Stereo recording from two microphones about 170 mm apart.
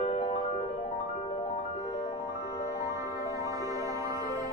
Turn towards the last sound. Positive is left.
turn(degrees=-20)  # may be behind; listen again after turning